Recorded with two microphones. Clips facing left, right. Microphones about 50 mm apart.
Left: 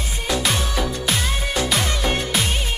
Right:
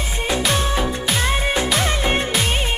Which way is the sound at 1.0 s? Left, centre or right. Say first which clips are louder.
Right 2 dB; centre.